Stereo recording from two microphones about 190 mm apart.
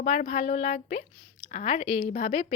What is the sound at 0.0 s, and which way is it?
A woman's voice, 40° left (ahead or behind).